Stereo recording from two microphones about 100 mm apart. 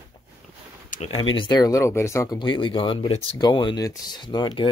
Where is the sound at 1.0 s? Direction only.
65° left (ahead or behind); by 2.4 s 30° left (ahead or behind).